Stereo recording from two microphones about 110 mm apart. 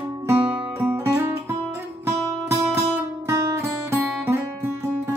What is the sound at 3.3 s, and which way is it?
Music, 25° right (ahead or behind).